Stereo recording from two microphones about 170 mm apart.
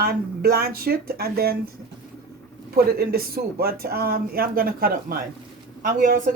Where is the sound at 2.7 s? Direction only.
65° right (ahead or behind).